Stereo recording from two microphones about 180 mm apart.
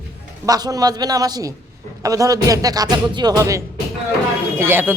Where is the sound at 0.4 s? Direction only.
20° right (ahead or behind).